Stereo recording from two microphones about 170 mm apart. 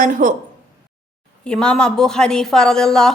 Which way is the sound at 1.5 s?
5° left (ahead or behind).